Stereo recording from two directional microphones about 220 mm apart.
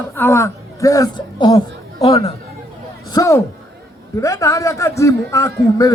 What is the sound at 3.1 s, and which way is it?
A man's voice, 15° left (ahead or behind).